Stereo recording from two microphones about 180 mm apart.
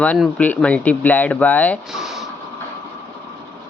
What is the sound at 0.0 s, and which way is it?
Speech, 5° left (ahead or behind).